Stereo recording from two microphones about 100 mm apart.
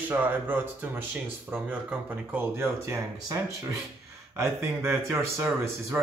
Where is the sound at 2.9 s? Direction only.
35° right (ahead or behind).